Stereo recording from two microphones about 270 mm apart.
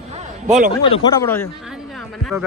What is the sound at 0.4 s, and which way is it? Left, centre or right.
Speech, right.